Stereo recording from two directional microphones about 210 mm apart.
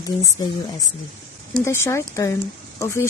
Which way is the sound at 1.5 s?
10° left (ahead or behind).